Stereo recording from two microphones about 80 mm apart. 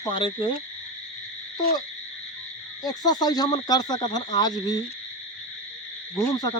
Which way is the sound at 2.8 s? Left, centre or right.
Left.